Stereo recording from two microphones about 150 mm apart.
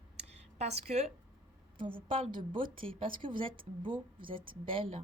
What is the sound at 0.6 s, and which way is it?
A woman's voice, 45° right (ahead or behind).